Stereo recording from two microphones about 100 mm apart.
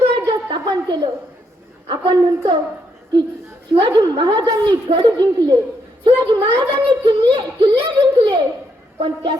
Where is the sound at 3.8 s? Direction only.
50° right (ahead or behind).